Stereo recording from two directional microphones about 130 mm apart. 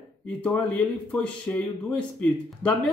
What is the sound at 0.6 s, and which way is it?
Speech, 10° left (ahead or behind).